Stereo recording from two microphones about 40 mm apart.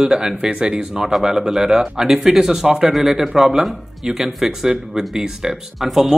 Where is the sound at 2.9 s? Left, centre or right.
Centre.